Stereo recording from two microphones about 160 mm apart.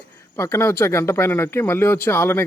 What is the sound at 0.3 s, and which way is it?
Speech, 15° left (ahead or behind).